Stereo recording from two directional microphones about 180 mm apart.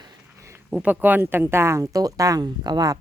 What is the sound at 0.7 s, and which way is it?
Speech, 10° right (ahead or behind).